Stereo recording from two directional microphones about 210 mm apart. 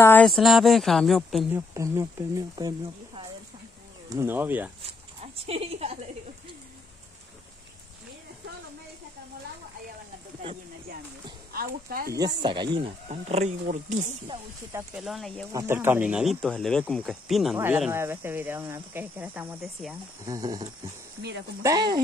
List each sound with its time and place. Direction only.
0.0 s speech: 5° left (ahead or behind)
1.7 s speech: 15° right (ahead or behind)
4.1 s speech: 10° right (ahead or behind)
4.8 s a sound: 30° right (ahead or behind)
11.5 s speech: 45° right (ahead or behind)
12.4 s speech: 20° right (ahead or behind)
15.0 s speech: centre (ahead or behind)
15.5 s speech: 10° right (ahead or behind)
20.2 s speech: 20° right (ahead or behind)
21.6 s speech: 20° right (ahead or behind)